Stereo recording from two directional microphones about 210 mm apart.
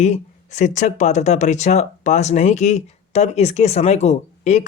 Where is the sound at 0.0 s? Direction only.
35° left (ahead or behind).